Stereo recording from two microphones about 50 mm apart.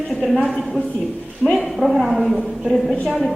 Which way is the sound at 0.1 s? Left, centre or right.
Centre.